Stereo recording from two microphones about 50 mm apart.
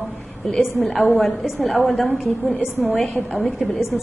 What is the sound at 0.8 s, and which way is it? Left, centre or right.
A woman's voice, centre.